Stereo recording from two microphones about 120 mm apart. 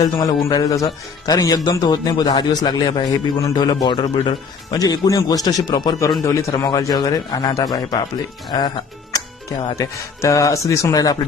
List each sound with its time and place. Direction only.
0.0 s a man's voice: 30° left (ahead or behind)
6.5 s a man's voice: 35° left (ahead or behind)
9.7 s speech: 25° left (ahead or behind)